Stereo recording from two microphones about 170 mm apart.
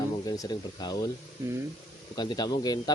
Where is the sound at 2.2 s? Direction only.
25° left (ahead or behind).